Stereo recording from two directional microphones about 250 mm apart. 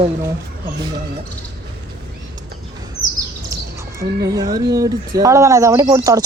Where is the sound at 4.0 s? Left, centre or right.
Centre.